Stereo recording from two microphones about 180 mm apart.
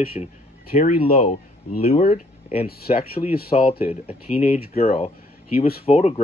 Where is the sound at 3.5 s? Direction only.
35° left (ahead or behind).